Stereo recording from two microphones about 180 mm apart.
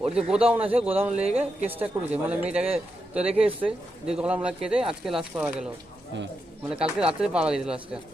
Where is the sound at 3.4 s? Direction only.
30° right (ahead or behind).